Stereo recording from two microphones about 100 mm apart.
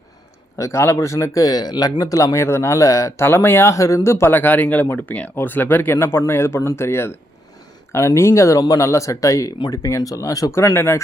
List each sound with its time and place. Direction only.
0.6 s speech: 30° left (ahead or behind)